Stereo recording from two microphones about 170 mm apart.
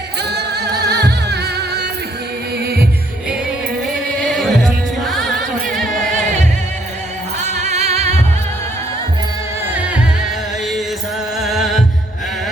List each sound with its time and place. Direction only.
0.2 s a capella: 75° right (ahead or behind)
0.8 s music: 75° right (ahead or behind)
4.3 s music: centre (ahead or behind)
6.1 s music: 45° right (ahead or behind)
11.3 s music: centre (ahead or behind)